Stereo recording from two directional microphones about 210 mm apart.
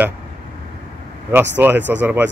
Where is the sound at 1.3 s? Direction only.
10° right (ahead or behind).